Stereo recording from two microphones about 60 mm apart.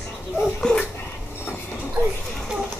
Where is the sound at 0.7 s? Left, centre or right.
Centre.